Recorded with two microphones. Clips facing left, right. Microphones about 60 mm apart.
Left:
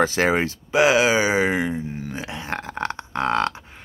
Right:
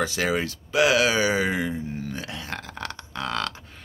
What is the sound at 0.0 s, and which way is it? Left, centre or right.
Speech, left.